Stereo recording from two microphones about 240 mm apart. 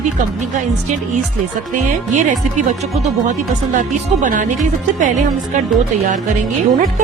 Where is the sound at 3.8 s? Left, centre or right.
Right.